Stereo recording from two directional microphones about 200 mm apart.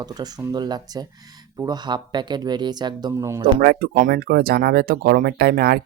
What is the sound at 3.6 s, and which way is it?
Speech, 50° right (ahead or behind).